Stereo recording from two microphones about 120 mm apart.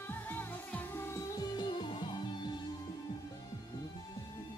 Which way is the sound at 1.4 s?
40° left (ahead or behind).